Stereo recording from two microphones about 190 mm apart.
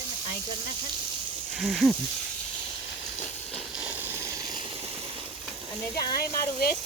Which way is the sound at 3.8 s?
10° right (ahead or behind).